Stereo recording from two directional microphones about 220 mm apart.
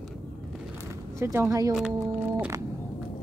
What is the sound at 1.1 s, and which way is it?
Speech, 10° right (ahead or behind).